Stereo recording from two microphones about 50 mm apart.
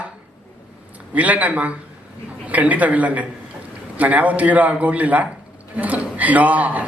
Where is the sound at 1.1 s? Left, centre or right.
Right.